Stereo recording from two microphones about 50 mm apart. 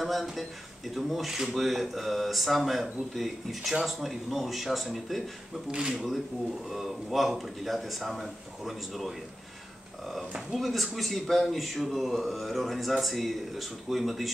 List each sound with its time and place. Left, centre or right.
0.0 s speech: centre
5.7 s speech: centre
6.7 s speech: centre
10.5 s speech: centre